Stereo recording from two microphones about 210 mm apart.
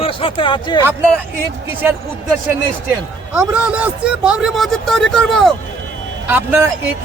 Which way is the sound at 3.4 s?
5° right (ahead or behind).